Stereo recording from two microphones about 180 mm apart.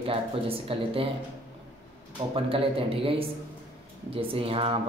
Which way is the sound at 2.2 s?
30° right (ahead or behind).